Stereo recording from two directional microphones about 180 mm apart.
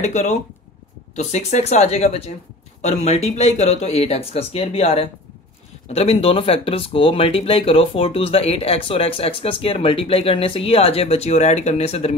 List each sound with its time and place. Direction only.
0.0 s speech: 40° left (ahead or behind)